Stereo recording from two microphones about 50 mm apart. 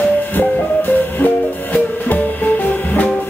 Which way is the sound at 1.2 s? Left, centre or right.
Left.